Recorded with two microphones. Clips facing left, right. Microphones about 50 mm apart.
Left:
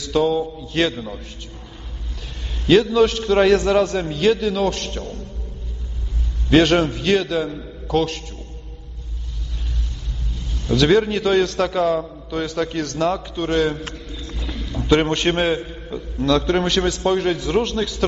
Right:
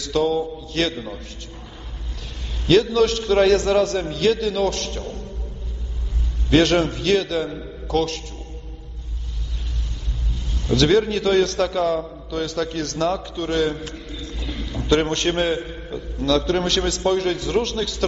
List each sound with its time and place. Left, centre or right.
0.1 s a man's voice: centre
0.9 s a man's voice: centre
2.6 s a man's voice: centre
6.5 s a man's voice: centre
10.7 s a man's voice: centre
13.5 s a man's voice: left
14.8 s a man's voice: centre